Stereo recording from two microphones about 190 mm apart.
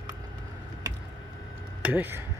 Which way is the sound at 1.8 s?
10° right (ahead or behind).